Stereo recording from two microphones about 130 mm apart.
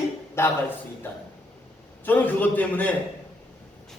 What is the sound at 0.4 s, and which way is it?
A man's voice, 20° left (ahead or behind).